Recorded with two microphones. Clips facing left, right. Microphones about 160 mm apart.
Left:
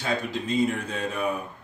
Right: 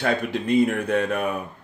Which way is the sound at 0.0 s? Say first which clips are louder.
Right 5 dB; 60° right (ahead or behind).